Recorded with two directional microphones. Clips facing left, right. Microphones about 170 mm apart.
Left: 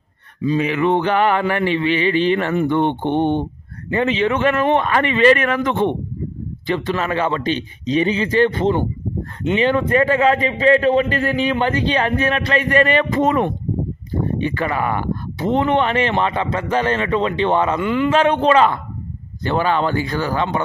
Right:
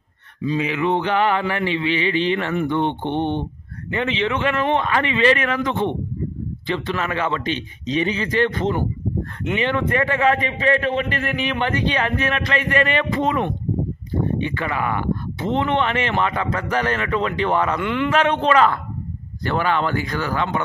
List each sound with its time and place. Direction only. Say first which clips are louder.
0.6 s speech: left 3 dB; 50° left (ahead or behind)
6.7 s a man's voice: left 4 dB; 35° left (ahead or behind)
17.7 s a man's voice: left 4 dB; 10° left (ahead or behind)
18.1 s a man's voice: left 3 dB; 35° left (ahead or behind)